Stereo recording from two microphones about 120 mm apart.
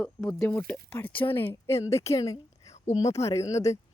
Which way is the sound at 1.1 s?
45° left (ahead or behind).